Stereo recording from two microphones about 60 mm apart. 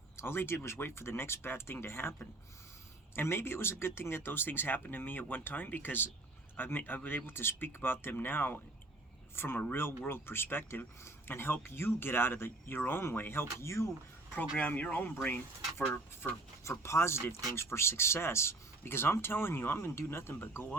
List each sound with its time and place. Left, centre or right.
0.2 s speech: left
3.2 s speech: left
14.6 s speech: left
16.6 s speech: left